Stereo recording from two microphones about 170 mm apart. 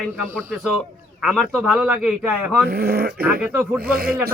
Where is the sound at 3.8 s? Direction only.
60° right (ahead or behind).